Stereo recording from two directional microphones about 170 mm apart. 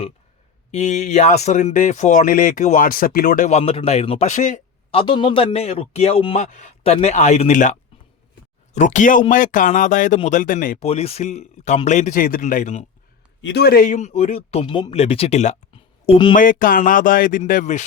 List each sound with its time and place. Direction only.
0.7 s speech: 40° left (ahead or behind)
3.6 s a man's voice: 35° left (ahead or behind)
4.9 s a man's voice: 30° left (ahead or behind); by 10.8 s 50° left (ahead or behind)
10.8 s a man's voice: 35° left (ahead or behind)
13.4 s a man's voice: 80° left; by 16.3 s 30° left (ahead or behind)
16.3 s speech: 50° left (ahead or behind)